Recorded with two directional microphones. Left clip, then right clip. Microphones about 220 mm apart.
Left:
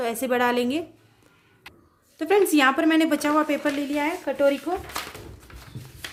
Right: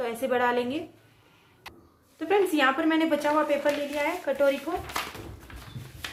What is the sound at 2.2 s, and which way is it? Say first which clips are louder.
A woman's voice: left 4 dB; 55° left (ahead or behind).